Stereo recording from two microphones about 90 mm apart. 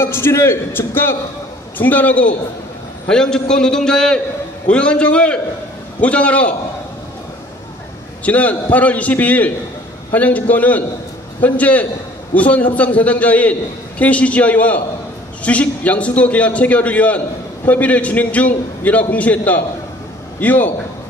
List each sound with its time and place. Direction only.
0.0 s a man's voice: 30° left (ahead or behind)
8.3 s a man's voice: 15° left (ahead or behind)